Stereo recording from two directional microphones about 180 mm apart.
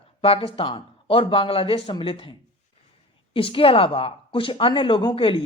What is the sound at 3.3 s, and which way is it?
Speech, 30° left (ahead or behind).